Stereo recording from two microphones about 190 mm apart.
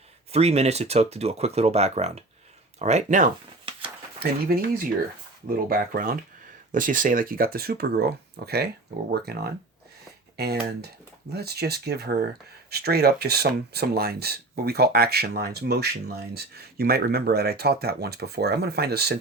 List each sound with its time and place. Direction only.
0.3 s speech: 35° right (ahead or behind)
4.2 s speech: 55° right (ahead or behind)